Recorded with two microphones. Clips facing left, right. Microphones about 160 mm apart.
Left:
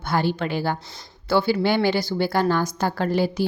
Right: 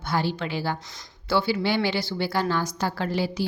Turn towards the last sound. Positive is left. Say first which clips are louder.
# left 4 dB
turn(degrees=50)  # may be behind; listen again after turning